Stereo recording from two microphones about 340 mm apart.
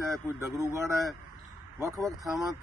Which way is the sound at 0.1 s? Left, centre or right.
Centre.